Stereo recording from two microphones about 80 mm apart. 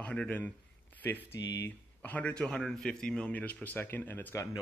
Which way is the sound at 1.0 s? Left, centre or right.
Left.